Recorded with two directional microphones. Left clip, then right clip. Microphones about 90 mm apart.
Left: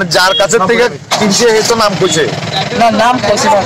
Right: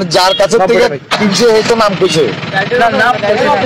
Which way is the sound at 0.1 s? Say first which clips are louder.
Right 1 dB; 5° right (ahead or behind).